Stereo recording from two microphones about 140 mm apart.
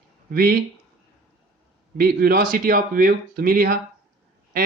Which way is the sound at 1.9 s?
90° right.